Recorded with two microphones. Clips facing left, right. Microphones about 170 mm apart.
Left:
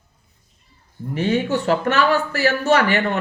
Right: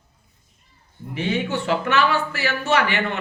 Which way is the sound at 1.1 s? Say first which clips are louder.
Left 4 dB; 40° left (ahead or behind).